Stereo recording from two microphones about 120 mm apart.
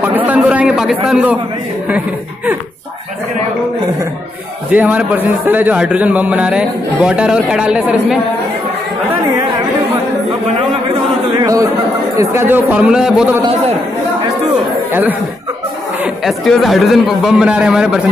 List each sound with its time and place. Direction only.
0.3 s a man's voice: 10° right (ahead or behind)
4.6 s a man's voice: 15° right (ahead or behind)
11.3 s a man's voice: 30° right (ahead or behind); by 13.4 s 10° right (ahead or behind)
14.9 s speech: 15° right (ahead or behind)
16.3 s a man's voice: centre (ahead or behind)